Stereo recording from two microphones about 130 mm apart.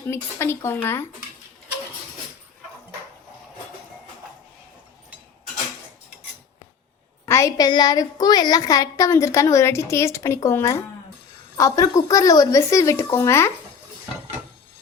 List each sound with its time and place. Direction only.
0.1 s a woman's voice: 20° left (ahead or behind)
7.3 s a woman's voice: 25° left (ahead or behind)